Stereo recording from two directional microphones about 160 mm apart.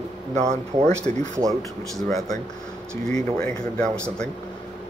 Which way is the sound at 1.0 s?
20° right (ahead or behind).